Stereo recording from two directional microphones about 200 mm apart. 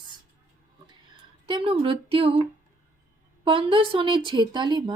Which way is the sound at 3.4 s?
25° right (ahead or behind).